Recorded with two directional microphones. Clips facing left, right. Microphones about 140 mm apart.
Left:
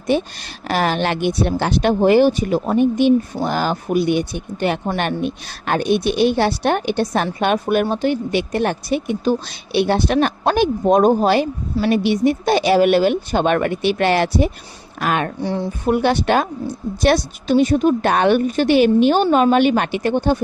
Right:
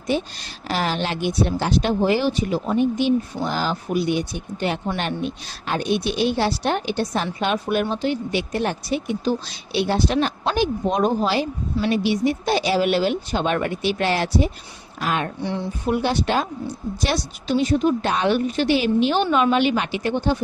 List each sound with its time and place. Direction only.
0.1 s speech: 60° left (ahead or behind)
15.4 s a woman's voice: 40° left (ahead or behind)
16.0 s a woman's voice: 60° left (ahead or behind)